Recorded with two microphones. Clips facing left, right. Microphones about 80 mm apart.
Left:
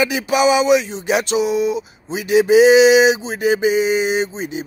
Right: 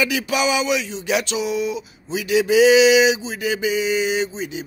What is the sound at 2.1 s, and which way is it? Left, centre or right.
Mantra, left.